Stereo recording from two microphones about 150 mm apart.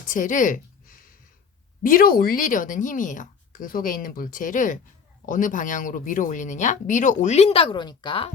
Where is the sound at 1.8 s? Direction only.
70° left (ahead or behind); by 8.3 s 35° left (ahead or behind).